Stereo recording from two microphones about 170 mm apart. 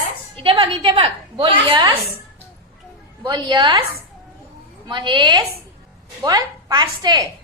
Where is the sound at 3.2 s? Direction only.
25° right (ahead or behind).